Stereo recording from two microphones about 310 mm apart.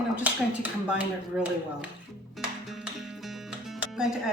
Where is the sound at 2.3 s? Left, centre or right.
Centre.